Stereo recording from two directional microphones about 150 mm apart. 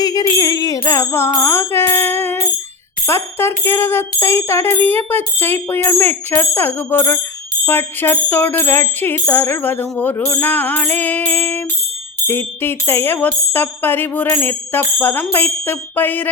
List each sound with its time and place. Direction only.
0.0 s music: 25° left (ahead or behind)
3.1 s speech: 15° left (ahead or behind)